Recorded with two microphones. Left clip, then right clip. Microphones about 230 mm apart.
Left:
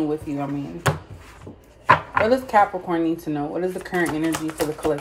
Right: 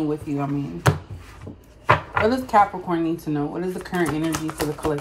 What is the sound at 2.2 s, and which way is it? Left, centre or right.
Speech, centre.